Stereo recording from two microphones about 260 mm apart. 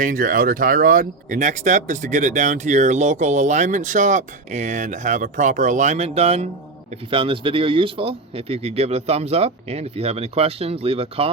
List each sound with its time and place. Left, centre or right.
0.0 s speech: right